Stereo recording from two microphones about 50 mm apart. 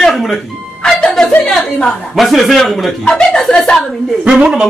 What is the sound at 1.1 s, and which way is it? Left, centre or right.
Speech, centre.